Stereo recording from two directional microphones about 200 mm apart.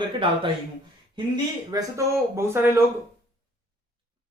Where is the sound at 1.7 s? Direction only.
15° right (ahead or behind).